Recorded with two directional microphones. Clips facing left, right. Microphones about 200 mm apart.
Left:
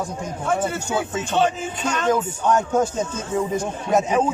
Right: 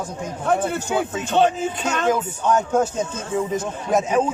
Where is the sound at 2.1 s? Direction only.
Centre (ahead or behind).